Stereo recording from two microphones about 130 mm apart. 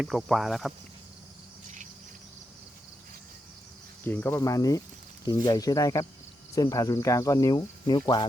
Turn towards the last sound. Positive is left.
turn(degrees=30)  # may be behind; listen again after turning